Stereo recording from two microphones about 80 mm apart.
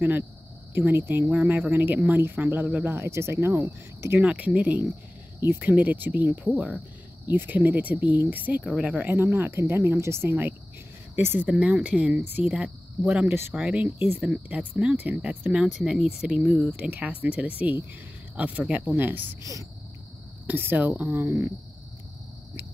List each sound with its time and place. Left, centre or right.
0.7 s speech: right
4.2 s speech: centre
9.1 s speech: right
11.4 s speech: centre
15.5 s speech: centre
15.8 s speech: centre
16.9 s speech: centre
20.4 s speech: right